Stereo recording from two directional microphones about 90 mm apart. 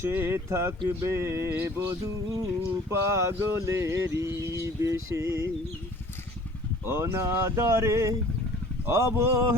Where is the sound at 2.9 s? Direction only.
30° right (ahead or behind).